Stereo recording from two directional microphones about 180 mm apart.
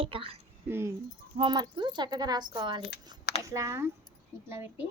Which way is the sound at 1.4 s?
25° right (ahead or behind).